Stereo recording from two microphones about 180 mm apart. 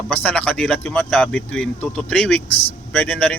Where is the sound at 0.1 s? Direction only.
10° left (ahead or behind).